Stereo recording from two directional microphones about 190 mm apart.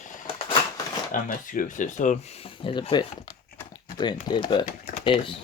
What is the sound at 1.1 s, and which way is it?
Speech, 45° left (ahead or behind).